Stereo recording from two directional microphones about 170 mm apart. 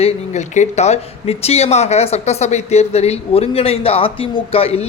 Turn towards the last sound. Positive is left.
turn(degrees=35)  # may be behind; listen again after turning